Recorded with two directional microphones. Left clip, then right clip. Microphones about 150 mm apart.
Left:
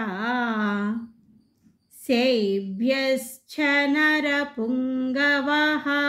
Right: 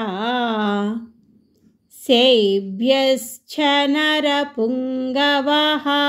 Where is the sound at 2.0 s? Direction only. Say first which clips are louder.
Right 8 dB; 35° right (ahead or behind).